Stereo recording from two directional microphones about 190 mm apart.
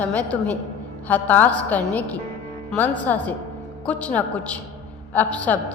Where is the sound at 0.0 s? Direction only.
10° left (ahead or behind).